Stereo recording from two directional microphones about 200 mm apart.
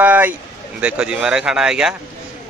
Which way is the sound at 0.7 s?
5° right (ahead or behind).